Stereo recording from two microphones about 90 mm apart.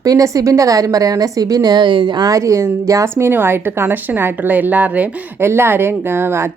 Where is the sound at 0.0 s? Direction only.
40° right (ahead or behind); by 5.0 s 15° right (ahead or behind).